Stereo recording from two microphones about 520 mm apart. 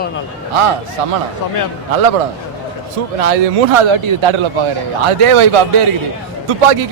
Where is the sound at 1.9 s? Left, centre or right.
Right.